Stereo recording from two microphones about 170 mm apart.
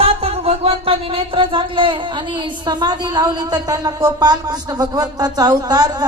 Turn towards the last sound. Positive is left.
turn(degrees=-20)  # may be behind; listen again after turning